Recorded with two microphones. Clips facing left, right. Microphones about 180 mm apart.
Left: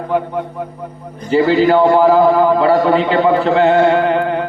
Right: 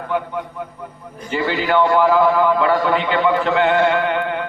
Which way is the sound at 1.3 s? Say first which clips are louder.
Left 8 dB; 35° left (ahead or behind).